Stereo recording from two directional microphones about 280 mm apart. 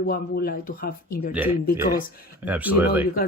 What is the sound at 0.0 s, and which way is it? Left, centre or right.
Speech, left.